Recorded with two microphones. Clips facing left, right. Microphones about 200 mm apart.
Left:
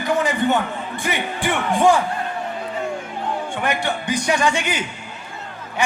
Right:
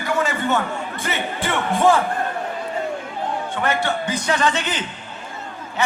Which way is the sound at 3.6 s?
15° left (ahead or behind).